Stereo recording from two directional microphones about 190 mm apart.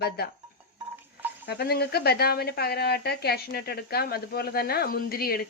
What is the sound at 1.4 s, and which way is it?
Speech, 55° left (ahead or behind).